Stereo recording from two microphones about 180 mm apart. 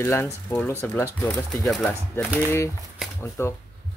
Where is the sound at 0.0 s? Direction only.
15° left (ahead or behind).